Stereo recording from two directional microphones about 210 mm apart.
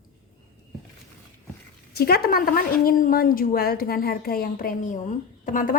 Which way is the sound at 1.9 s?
50° left (ahead or behind).